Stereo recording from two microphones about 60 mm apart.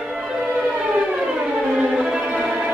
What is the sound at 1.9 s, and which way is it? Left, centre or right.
Music, centre.